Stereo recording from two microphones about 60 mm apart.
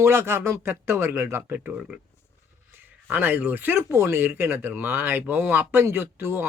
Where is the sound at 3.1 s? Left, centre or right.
Right.